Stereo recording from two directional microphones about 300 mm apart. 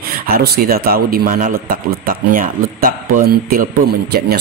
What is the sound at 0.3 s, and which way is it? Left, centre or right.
Speech, right.